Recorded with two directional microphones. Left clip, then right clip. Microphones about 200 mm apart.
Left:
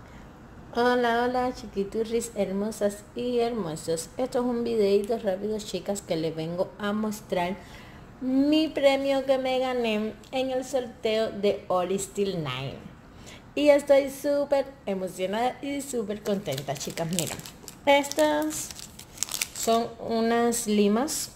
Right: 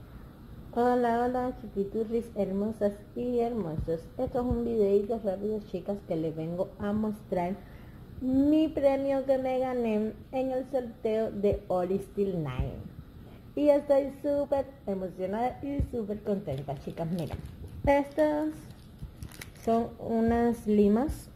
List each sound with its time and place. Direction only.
0.7 s a woman's voice: 25° left (ahead or behind); by 17.4 s 40° left (ahead or behind)
17.8 s a woman's voice: 25° left (ahead or behind)